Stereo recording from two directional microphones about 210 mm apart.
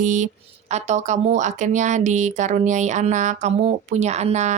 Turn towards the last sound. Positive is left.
turn(degrees=-30)  # may be behind; listen again after turning